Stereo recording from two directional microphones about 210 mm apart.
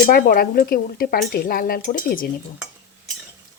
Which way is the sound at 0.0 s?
45° left (ahead or behind).